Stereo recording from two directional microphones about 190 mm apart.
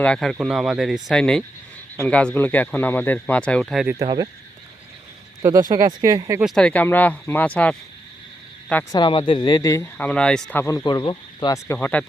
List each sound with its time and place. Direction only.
0.0 s speech: 5° left (ahead or behind)
3.9 s speech: 20° right (ahead or behind)
5.4 s speech: 20° right (ahead or behind)
6.4 s speech: centre (ahead or behind)
8.9 s speech: 25° left (ahead or behind)